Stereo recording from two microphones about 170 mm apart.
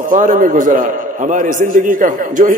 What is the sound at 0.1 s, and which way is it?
A man's voice, 50° right (ahead or behind).